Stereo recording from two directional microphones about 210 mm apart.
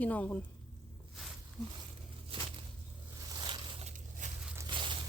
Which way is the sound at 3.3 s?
20° right (ahead or behind).